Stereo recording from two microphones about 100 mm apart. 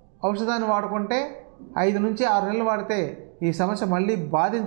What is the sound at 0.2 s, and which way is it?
Speech, 10° right (ahead or behind).